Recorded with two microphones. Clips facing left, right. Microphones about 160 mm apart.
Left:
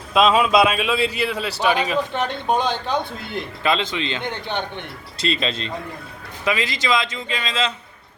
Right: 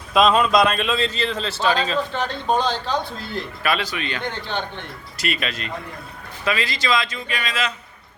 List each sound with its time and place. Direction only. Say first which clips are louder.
0.1 s a man's voice: even; centre (ahead or behind); by 7.7 s 25° left (ahead or behind)